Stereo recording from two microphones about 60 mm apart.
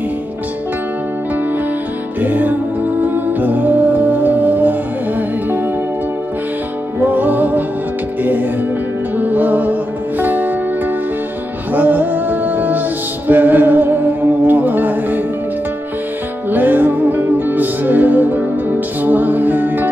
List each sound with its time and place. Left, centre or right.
2.2 s music: right
7.1 s music: right
11.7 s music: right
16.4 s music: right